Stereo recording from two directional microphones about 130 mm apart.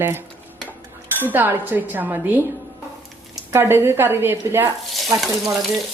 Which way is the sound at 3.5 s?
15° right (ahead or behind).